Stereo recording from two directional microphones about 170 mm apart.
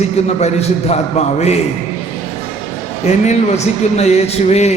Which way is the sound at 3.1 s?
40° left (ahead or behind).